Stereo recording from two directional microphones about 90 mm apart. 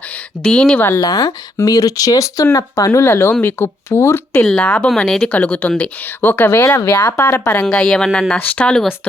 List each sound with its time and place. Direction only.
0.4 s speech: 10° left (ahead or behind)
0.8 s speech: 25° left (ahead or behind)
1.0 s speech: 40° left (ahead or behind)
3.1 s speech: 30° left (ahead or behind)
4.4 s speech: 10° left (ahead or behind)
5.3 s speech: 15° left (ahead or behind)
7.6 s speech: 5° left (ahead or behind)
8.4 s speech: 15° left (ahead or behind)